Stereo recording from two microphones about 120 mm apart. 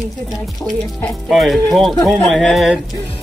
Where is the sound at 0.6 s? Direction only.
Centre (ahead or behind).